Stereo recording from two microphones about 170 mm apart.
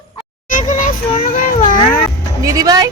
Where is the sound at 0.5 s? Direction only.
50° left (ahead or behind).